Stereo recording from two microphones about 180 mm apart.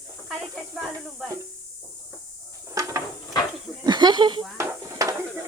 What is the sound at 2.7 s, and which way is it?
Dishes, 15° right (ahead or behind).